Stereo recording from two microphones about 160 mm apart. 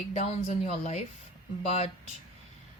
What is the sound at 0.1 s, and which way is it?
Speech, 45° left (ahead or behind).